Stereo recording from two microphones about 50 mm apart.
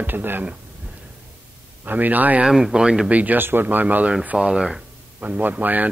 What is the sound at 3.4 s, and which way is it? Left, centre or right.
Speech, right.